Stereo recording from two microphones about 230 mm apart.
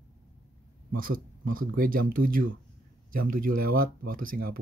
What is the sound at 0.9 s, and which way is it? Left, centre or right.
Speech, right.